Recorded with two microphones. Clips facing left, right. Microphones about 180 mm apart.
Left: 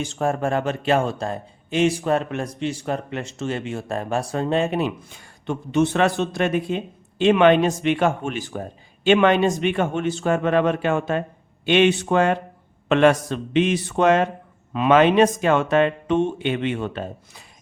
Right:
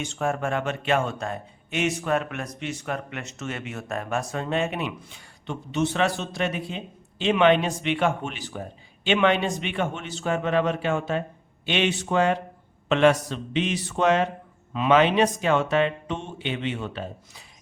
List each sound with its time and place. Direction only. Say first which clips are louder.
0.0 s speech: left 4 dB; 35° left (ahead or behind); by 17.4 s 50° left (ahead or behind)